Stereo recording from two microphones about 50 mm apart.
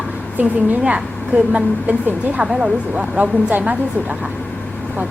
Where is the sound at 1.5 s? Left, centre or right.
Right.